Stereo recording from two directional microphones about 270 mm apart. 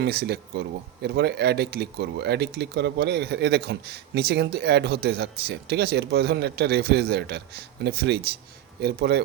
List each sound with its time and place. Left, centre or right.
0.0 s speech: right